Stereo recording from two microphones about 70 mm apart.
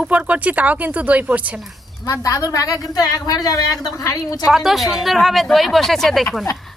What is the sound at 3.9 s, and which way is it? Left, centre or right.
Speech, left.